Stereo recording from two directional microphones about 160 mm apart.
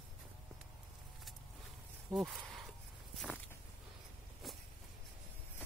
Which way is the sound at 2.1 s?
Centre (ahead or behind).